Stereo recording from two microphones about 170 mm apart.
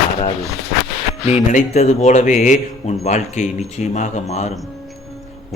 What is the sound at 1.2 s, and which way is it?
A man's voice, 40° left (ahead or behind).